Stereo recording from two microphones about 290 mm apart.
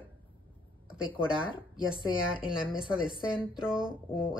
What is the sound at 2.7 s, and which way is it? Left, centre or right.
A woman's voice, centre.